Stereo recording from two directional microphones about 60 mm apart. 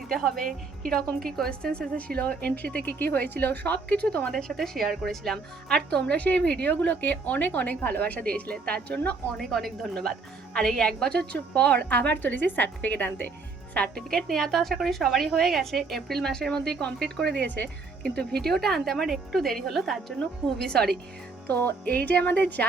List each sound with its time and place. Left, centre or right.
0.1 s a woman's voice: centre; by 4.3 s left
4.3 s a woman's voice: centre
6.0 s a woman's voice: left
9.4 s a woman's voice: centre; by 13.2 s left
13.9 s a woman's voice: centre; by 17.7 s left
18.2 s a woman's voice: centre
21.4 s a woman's voice: left